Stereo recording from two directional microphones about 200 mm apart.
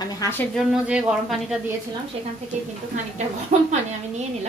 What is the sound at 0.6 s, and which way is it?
Speech, 5° right (ahead or behind).